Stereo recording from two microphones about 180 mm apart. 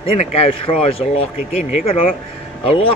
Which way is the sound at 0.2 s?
35° left (ahead or behind).